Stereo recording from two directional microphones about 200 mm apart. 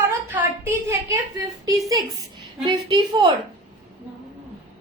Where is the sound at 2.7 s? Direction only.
25° right (ahead or behind).